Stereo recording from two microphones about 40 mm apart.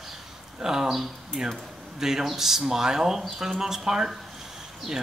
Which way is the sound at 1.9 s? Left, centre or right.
Centre.